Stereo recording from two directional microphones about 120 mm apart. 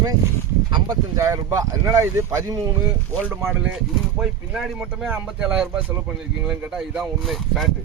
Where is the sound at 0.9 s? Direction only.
25° right (ahead or behind).